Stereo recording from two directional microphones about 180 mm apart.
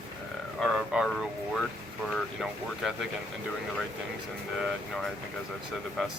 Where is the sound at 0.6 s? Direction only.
Centre (ahead or behind).